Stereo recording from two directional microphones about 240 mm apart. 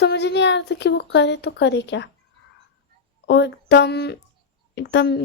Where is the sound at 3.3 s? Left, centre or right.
Left.